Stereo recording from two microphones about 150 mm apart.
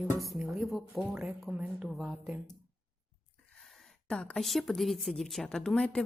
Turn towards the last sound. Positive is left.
turn(degrees=5)  # may be behind; listen again after turning